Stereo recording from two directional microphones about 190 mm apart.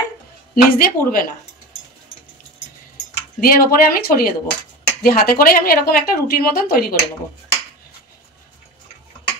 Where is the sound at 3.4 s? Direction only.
50° left (ahead or behind).